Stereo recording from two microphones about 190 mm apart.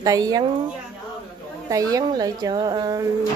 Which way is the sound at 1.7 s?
20° right (ahead or behind).